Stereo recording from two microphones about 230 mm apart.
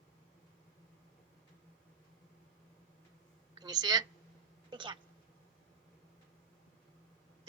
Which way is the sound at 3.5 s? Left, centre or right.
Centre.